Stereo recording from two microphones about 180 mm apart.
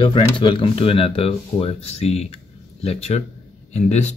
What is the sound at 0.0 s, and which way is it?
Speech, 25° left (ahead or behind).